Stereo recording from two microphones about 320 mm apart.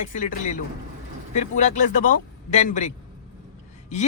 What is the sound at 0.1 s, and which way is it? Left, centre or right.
Speech, left.